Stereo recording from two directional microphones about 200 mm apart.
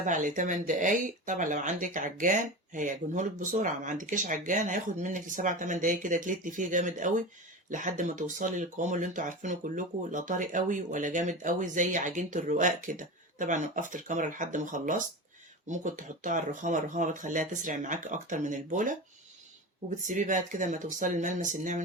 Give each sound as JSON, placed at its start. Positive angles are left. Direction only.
{"t": 0.0, "sound": "speech", "side_deg": -40}
{"t": 20.1, "sound": "speech", "side_deg": -40}